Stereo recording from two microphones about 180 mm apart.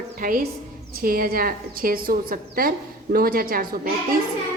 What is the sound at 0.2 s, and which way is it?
A woman's voice, 50° right (ahead or behind).